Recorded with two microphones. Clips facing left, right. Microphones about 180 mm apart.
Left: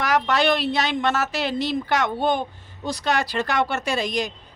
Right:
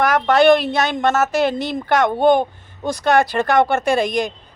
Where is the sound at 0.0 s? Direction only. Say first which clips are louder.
Right 7 dB; 50° right (ahead or behind).